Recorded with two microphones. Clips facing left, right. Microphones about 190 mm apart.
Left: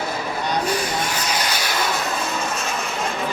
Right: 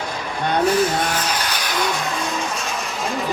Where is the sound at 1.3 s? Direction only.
10° left (ahead or behind).